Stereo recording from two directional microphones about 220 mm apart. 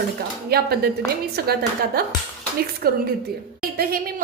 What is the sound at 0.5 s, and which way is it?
A woman's voice, 45° right (ahead or behind).